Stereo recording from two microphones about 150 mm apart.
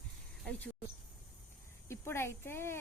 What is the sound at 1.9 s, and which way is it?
Speech, 15° left (ahead or behind).